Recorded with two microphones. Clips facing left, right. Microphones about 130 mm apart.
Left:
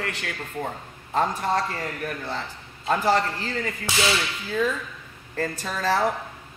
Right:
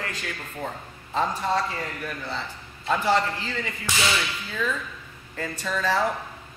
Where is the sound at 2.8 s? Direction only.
45° left (ahead or behind).